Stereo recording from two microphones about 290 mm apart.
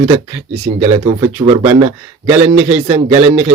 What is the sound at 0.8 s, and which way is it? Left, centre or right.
Speech, centre.